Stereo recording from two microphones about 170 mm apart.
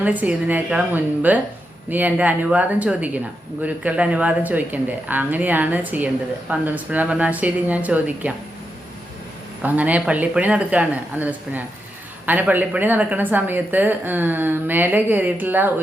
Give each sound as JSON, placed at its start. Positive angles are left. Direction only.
{"t": 0.0, "sound": "a woman's voice", "side_deg": -10}
{"t": 9.6, "sound": "a woman's voice", "side_deg": -10}